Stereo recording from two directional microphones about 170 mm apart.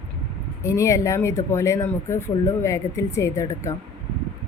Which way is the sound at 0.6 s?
15° left (ahead or behind).